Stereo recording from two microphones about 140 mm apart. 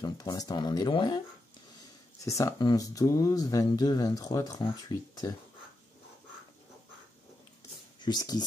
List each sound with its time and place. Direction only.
0.0 s speech: 25° left (ahead or behind)
2.2 s speech: 20° left (ahead or behind)
8.0 s speech: 30° left (ahead or behind)